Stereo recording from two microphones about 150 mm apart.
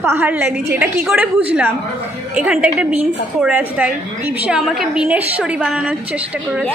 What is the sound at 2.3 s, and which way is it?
A woman's voice, 10° right (ahead or behind).